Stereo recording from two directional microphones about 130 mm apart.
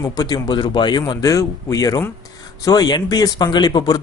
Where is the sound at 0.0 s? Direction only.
30° left (ahead or behind).